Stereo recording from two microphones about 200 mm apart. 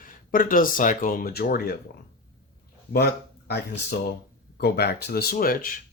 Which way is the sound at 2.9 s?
55° left (ahead or behind).